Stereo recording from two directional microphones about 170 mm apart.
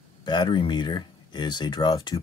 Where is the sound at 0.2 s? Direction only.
25° left (ahead or behind).